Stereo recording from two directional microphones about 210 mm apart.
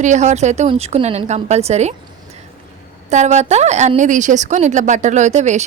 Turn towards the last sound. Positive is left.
turn(degrees=-35)  # may be behind; listen again after turning